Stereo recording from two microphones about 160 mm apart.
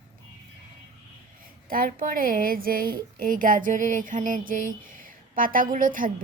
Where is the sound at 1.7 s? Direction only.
65° right (ahead or behind).